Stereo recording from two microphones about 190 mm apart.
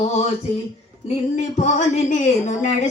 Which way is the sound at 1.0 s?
35° left (ahead or behind).